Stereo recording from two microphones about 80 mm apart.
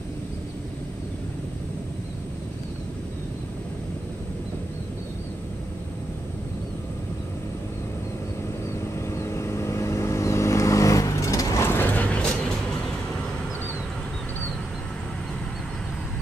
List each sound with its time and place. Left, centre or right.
8.9 s vehicle: left; by 13.3 s centre